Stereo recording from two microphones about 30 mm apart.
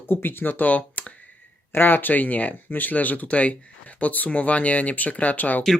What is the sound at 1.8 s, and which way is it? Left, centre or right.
Speech, left.